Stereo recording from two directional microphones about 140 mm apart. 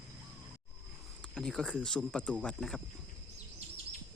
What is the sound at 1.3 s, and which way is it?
Speech, centre (ahead or behind).